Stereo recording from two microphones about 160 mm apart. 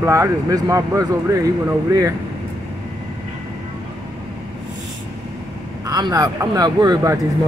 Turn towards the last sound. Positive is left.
turn(degrees=-25)  # may be behind; listen again after turning